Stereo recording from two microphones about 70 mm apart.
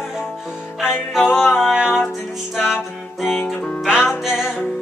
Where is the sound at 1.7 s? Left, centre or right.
Centre.